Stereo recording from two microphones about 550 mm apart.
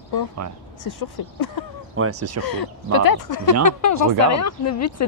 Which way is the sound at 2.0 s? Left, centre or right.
Right.